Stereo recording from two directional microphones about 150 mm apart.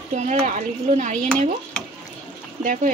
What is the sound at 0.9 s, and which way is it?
Dishes, 55° right (ahead or behind).